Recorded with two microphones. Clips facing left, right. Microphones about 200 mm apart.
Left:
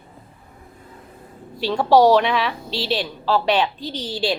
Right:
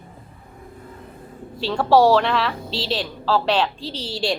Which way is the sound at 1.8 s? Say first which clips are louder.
Left 1 dB; 5° right (ahead or behind).